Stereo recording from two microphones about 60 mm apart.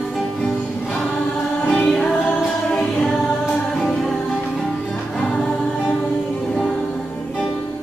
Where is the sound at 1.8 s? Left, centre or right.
Centre.